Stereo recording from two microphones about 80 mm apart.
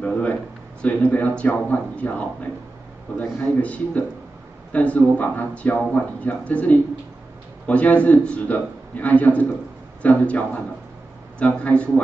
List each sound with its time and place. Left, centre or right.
0.8 s speech: centre
3.4 s speech: centre